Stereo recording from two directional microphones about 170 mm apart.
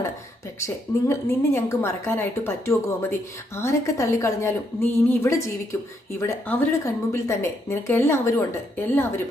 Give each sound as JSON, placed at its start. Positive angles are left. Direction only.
{"t": 0.6, "sound": "a woman's voice", "side_deg": 15}